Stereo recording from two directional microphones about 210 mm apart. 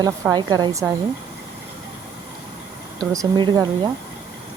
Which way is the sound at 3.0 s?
15° right (ahead or behind).